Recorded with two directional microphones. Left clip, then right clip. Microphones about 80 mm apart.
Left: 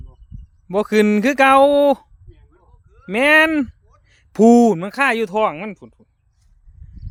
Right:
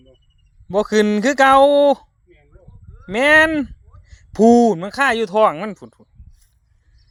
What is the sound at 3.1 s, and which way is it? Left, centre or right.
Speech, left.